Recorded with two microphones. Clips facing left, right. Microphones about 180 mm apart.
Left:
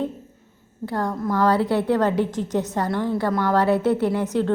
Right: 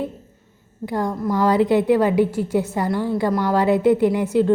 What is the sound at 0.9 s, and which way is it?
A woman's voice, 15° right (ahead or behind).